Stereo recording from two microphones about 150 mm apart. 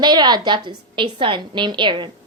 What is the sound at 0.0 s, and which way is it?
A woman's voice, 30° right (ahead or behind).